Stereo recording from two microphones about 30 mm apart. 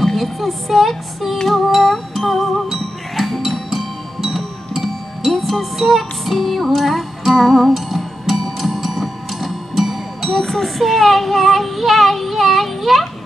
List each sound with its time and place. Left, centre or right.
0.0 s music: centre
7.7 s music: centre
10.4 s child singing: centre